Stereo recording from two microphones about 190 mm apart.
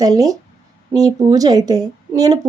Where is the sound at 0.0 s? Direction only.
20° right (ahead or behind).